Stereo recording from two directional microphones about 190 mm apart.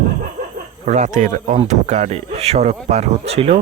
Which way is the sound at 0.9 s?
40° right (ahead or behind).